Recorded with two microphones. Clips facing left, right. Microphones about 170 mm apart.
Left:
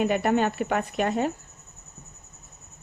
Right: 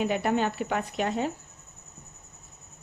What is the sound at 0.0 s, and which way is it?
Speech, 55° left (ahead or behind).